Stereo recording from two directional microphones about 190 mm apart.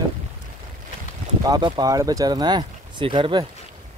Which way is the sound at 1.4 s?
20° right (ahead or behind).